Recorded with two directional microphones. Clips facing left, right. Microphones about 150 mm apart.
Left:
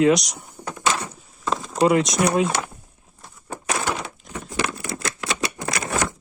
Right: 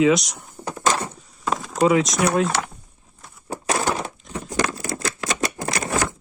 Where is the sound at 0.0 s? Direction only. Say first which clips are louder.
Even; centre (ahead or behind).